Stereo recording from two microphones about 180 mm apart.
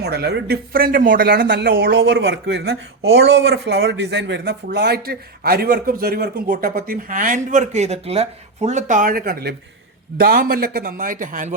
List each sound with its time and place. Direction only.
0.0 s a man's voice: 65° right (ahead or behind); by 11.5 s 45° right (ahead or behind)